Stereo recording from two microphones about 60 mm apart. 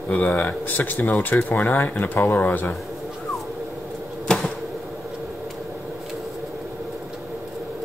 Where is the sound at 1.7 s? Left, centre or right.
Left.